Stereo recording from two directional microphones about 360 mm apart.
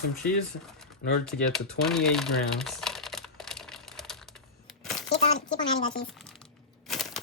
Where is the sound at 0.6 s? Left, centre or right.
Centre.